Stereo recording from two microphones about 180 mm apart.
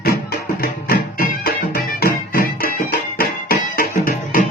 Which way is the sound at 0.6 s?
55° left (ahead or behind).